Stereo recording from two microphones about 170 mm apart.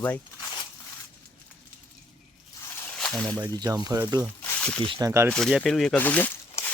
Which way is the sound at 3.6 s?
20° right (ahead or behind).